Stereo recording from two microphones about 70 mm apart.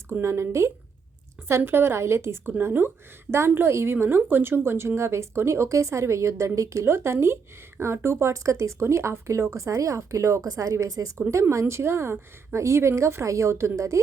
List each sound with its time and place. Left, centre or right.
0.1 s speech: right